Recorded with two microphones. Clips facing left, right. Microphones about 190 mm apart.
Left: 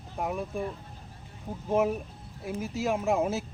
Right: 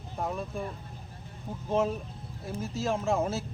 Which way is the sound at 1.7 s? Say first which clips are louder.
Left 2 dB; 10° left (ahead or behind).